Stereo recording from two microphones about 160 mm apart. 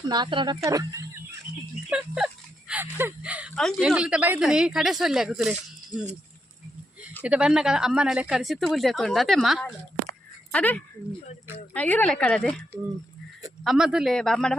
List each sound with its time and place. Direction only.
0.1 s speech: 30° right (ahead or behind)
1.9 s speech: 5° right (ahead or behind)
7.2 s speech: 5° right (ahead or behind)
13.7 s speech: 5° right (ahead or behind)